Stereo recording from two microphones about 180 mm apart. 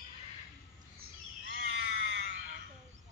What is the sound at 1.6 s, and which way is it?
Crow, 90° right.